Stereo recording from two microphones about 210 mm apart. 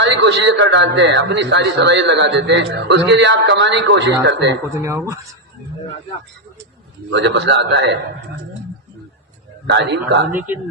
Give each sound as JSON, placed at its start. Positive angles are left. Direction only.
{"t": 0.0, "sound": "a man's voice", "side_deg": -55}
{"t": 4.8, "sound": "speech", "side_deg": -15}
{"t": 7.1, "sound": "a man's voice", "side_deg": -55}
{"t": 9.6, "sound": "a man's voice", "side_deg": -55}
{"t": 10.3, "sound": "speech", "side_deg": -10}